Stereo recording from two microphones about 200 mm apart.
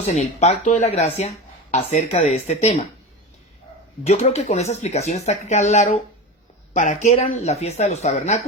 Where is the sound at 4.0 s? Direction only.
35° left (ahead or behind).